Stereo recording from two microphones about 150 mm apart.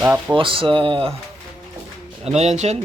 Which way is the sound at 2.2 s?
50° right (ahead or behind).